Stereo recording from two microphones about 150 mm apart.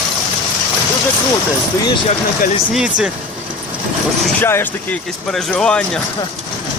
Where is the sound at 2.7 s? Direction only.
5° right (ahead or behind).